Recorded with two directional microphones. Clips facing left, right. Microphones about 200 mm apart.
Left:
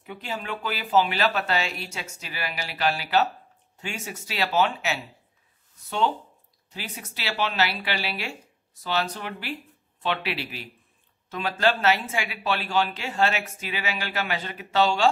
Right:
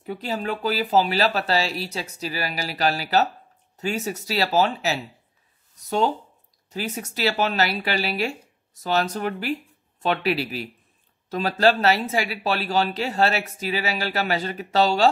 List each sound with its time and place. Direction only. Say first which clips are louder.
0.0 s speech: right 6 dB; 40° right (ahead or behind)